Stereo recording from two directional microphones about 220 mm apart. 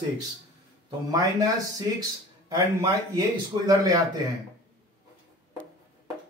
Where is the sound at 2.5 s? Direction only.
15° right (ahead or behind).